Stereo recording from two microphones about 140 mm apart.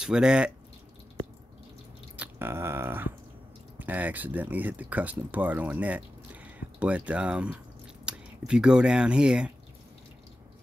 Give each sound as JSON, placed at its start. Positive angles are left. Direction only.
{"t": 0.0, "sound": "speech", "side_deg": -5}
{"t": 2.1, "sound": "a sound", "side_deg": -15}
{"t": 3.7, "sound": "speech", "side_deg": -10}